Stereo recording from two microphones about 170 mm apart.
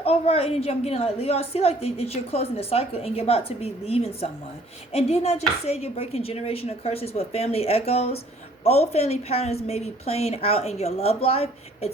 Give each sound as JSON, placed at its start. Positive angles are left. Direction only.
{"t": 0.0, "sound": "a woman's voice", "side_deg": 35}